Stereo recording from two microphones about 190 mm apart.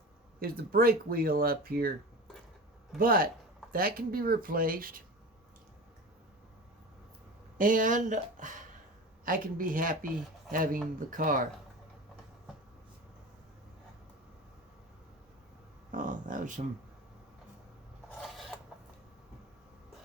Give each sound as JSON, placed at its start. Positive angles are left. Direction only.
{"t": 0.3, "sound": "speech", "side_deg": -50}
{"t": 3.0, "sound": "speech", "side_deg": -50}
{"t": 7.6, "sound": "speech", "side_deg": -45}
{"t": 15.9, "sound": "a sound", "side_deg": -45}